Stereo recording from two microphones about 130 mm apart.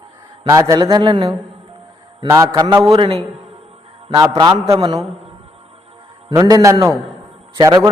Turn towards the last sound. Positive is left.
turn(degrees=-35)  # may be behind; listen again after turning